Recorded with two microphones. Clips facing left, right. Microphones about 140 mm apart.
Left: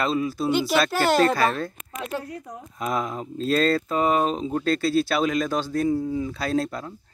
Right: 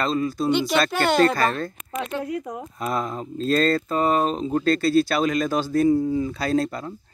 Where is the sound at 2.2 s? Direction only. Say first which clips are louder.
Right 8 dB; 90° right.